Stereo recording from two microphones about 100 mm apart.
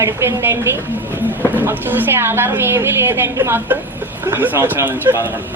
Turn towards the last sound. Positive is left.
turn(degrees=-20)  # may be behind; listen again after turning